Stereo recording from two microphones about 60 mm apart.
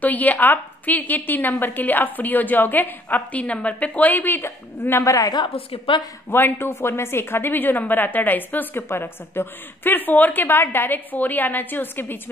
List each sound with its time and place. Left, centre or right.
0.0 s a woman's voice: left
3.5 s a woman's voice: left
5.0 s a woman's voice: left
6.3 s a woman's voice: left